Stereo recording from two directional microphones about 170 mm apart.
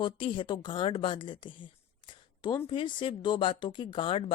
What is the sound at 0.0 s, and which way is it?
Speech, 30° left (ahead or behind).